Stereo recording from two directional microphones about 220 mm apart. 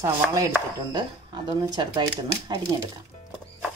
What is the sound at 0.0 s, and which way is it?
Chopping, 15° right (ahead or behind).